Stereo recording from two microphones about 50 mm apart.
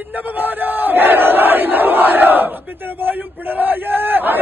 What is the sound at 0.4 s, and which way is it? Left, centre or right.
Crowd, right.